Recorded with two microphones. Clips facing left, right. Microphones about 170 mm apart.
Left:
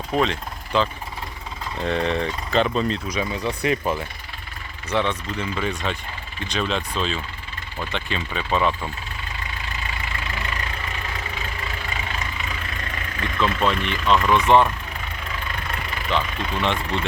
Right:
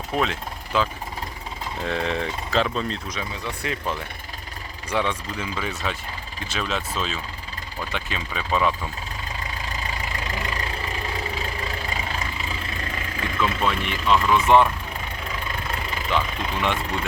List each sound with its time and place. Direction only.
0.1 s vehicle: 5° right (ahead or behind)
1.8 s speech: centre (ahead or behind)
3.2 s speech: 15° left (ahead or behind)
4.9 s speech: 10° right (ahead or behind)
9.6 s vehicle: 35° right (ahead or behind)
13.6 s speech: 5° right (ahead or behind)
16.0 s speech: 10° right (ahead or behind)